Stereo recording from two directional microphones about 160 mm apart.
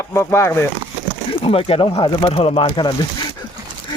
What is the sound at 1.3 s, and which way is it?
Speech, 35° left (ahead or behind).